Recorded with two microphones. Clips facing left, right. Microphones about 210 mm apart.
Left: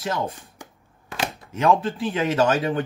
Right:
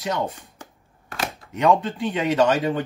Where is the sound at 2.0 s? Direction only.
5° left (ahead or behind).